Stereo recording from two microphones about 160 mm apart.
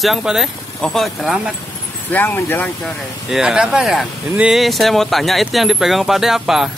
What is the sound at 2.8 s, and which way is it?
Speech, 5° right (ahead or behind).